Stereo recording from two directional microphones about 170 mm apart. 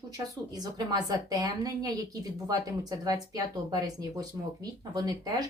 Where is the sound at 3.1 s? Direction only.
20° right (ahead or behind).